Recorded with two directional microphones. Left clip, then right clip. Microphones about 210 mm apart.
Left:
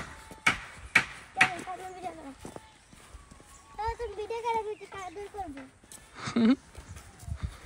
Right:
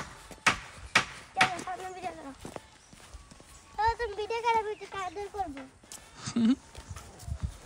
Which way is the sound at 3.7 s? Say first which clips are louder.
Right 5 dB; centre (ahead or behind).